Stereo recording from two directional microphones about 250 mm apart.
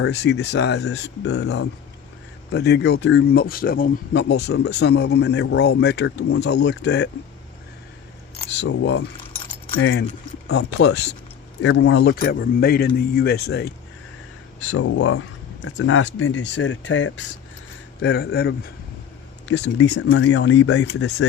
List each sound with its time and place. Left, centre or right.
0.0 s speech: left
8.5 s speech: left
18.0 s speech: left
20.7 s speech: left